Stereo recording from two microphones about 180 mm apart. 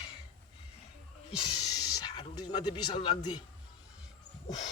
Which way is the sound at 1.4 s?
20° left (ahead or behind).